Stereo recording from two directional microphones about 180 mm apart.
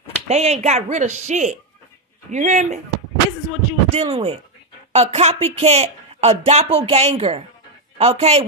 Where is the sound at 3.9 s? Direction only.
35° right (ahead or behind).